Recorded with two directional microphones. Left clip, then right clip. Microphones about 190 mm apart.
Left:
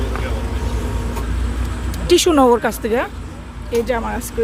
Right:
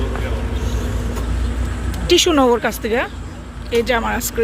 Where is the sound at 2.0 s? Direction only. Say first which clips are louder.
Left 1 dB; 20° left (ahead or behind).